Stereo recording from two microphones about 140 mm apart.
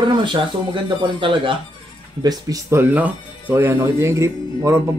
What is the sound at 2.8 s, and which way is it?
Speech, 10° right (ahead or behind).